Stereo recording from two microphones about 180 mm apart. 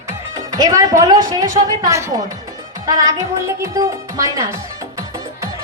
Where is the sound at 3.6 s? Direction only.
20° right (ahead or behind).